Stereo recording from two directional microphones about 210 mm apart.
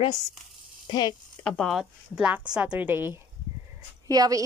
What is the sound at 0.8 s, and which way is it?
Speech, 20° left (ahead or behind).